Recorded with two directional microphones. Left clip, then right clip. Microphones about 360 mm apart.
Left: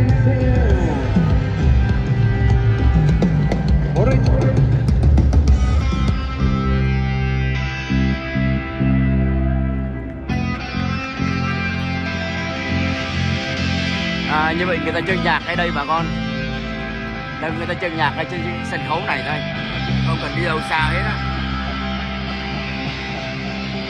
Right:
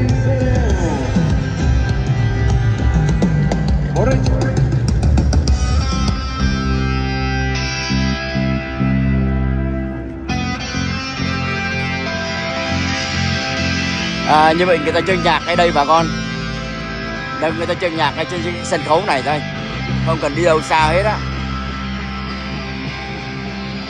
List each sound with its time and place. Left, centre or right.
0.0 s music: right
2.9 s music: right
7.9 s music: right
12.7 s music: centre
17.4 s speech: centre